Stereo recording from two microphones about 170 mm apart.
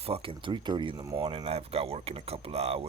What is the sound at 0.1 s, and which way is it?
Speech, 30° right (ahead or behind).